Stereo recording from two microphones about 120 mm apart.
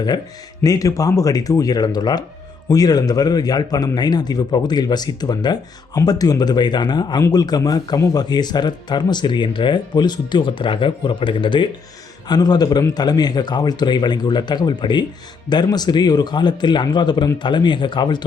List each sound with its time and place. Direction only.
0.6 s speech: 30° left (ahead or behind)